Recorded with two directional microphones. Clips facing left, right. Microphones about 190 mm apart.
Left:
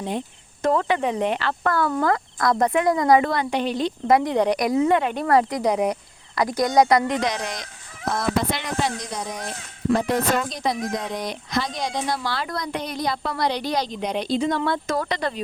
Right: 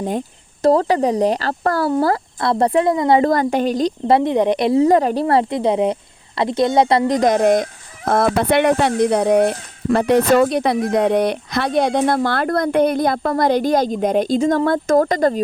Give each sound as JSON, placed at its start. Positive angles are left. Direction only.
{"t": 0.6, "sound": "speech", "side_deg": -35}
{"t": 3.2, "sound": "speech", "side_deg": -45}
{"t": 5.2, "sound": "speech", "side_deg": -25}
{"t": 7.2, "sound": "speech", "side_deg": -50}